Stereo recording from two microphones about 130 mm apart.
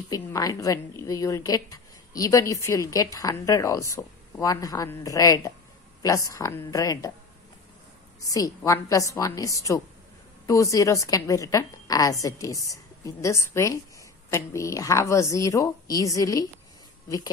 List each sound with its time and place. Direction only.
0.1 s a woman's voice: 30° left (ahead or behind)
8.2 s a woman's voice: 25° left (ahead or behind)